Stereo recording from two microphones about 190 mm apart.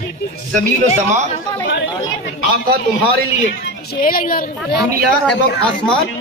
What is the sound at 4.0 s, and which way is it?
Speech, 50° left (ahead or behind).